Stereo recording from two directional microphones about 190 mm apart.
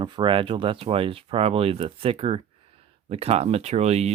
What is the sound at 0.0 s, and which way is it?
Speech, 25° right (ahead or behind).